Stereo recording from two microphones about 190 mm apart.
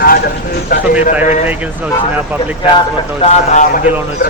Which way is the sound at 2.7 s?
30° left (ahead or behind).